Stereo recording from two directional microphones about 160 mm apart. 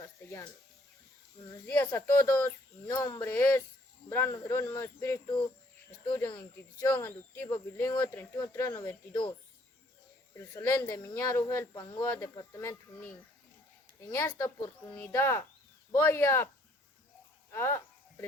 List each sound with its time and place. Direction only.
1.6 s speech: 10° left (ahead or behind)
10.3 s speech: 15° left (ahead or behind)
14.1 s speech: 15° left (ahead or behind)
17.5 s a sound: 15° left (ahead or behind)